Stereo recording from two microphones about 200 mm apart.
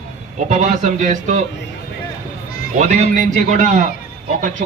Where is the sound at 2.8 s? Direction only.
35° right (ahead or behind).